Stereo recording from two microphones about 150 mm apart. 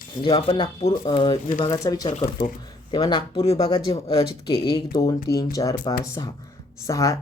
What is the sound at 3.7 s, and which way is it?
Speech, 30° left (ahead or behind).